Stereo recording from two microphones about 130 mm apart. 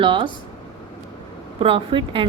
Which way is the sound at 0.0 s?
40° right (ahead or behind).